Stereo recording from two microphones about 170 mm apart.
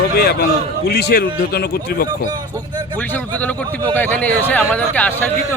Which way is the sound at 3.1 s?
10° left (ahead or behind).